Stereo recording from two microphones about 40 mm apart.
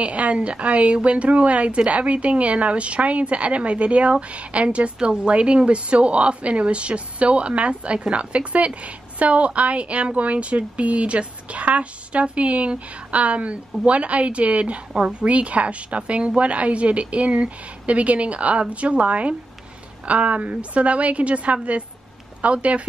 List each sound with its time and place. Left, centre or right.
0.0 s speech: right